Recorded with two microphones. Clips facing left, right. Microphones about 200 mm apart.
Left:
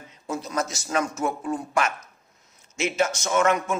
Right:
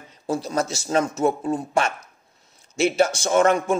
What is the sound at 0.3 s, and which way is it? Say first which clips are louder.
Speech: right 4 dB; 30° right (ahead or behind).